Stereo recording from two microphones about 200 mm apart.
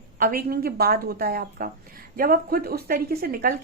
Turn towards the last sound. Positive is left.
turn(degrees=-45)  # may be behind; listen again after turning